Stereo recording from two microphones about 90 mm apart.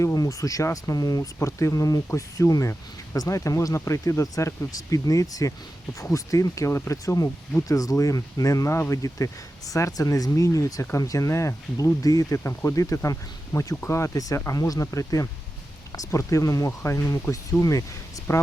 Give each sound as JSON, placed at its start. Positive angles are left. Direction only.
{"t": 0.0, "sound": "speech", "side_deg": 35}